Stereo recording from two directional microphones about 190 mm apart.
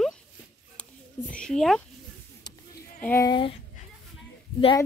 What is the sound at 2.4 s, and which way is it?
Sheep, 20° left (ahead or behind).